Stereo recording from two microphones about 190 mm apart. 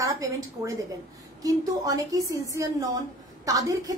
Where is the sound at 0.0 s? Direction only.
15° right (ahead or behind).